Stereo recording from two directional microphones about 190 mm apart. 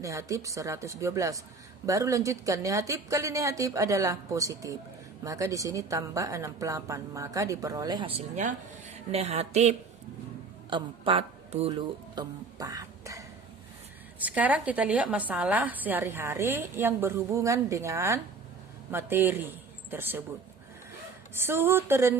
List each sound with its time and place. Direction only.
0.0 s a woman's voice: 15° right (ahead or behind); by 9.7 s 35° right (ahead or behind)
10.7 s speech: 25° right (ahead or behind)
14.3 s a woman's voice: 10° right (ahead or behind)
21.3 s a woman's voice: 10° right (ahead or behind)